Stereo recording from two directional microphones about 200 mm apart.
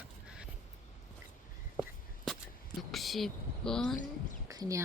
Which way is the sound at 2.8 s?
Centre (ahead or behind).